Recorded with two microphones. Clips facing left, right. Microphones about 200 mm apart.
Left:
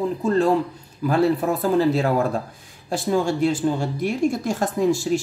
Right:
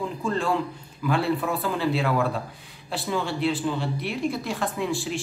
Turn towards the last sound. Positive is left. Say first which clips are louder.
# left 8 dB
turn(degrees=40)  # may be behind; listen again after turning